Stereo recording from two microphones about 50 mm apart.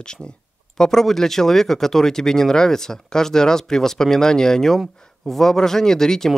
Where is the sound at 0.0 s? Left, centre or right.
Centre.